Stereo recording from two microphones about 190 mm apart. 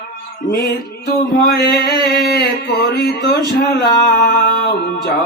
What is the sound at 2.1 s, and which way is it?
Music, 55° left (ahead or behind).